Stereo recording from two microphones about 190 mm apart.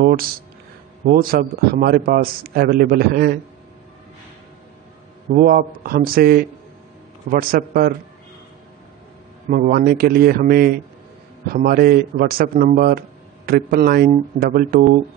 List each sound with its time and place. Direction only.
1.1 s a man's voice: 50° right (ahead or behind)
5.3 s a man's voice: 50° right (ahead or behind)
9.5 s a man's voice: 50° right (ahead or behind)